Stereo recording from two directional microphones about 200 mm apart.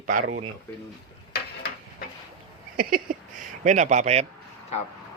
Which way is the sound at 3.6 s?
35° right (ahead or behind).